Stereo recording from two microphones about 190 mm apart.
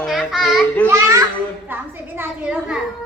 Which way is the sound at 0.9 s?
15° right (ahead or behind).